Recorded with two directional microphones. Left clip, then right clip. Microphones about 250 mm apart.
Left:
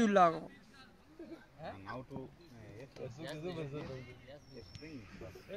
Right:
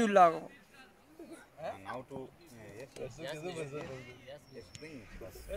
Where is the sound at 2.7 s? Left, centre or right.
Right.